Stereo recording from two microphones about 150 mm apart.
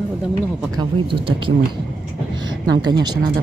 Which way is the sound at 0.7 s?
35° right (ahead or behind).